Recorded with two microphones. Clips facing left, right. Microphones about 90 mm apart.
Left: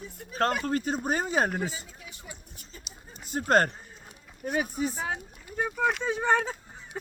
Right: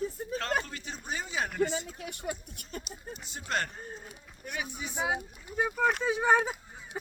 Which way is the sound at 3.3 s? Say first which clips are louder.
Left 10 dB; 45° left (ahead or behind).